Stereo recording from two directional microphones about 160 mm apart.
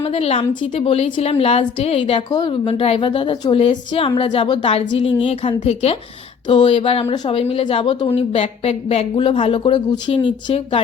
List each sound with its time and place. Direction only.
0.0 s a woman's voice: 35° left (ahead or behind)